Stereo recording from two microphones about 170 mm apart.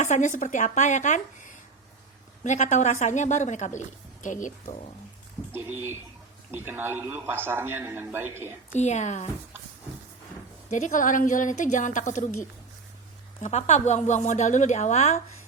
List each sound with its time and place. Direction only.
0.0 s a woman's voice: 45° left (ahead or behind)
5.5 s a man's voice: 15° right (ahead or behind)
8.7 s a woman's voice: 45° left (ahead or behind)
10.7 s a woman's voice: 50° left (ahead or behind)
13.4 s a woman's voice: 40° left (ahead or behind)